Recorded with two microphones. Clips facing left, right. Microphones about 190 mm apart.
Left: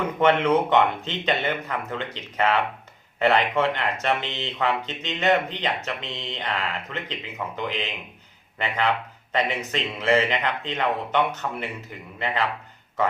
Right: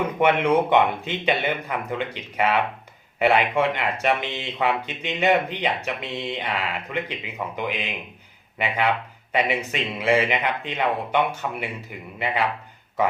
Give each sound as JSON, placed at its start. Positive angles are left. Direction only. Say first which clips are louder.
{"t": 0.2, "sound": "speech", "louder": "even", "side_deg": -10}